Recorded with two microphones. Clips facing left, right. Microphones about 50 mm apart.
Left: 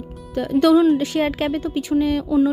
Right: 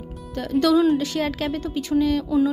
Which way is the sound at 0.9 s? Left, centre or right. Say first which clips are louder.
Left 3 dB; left.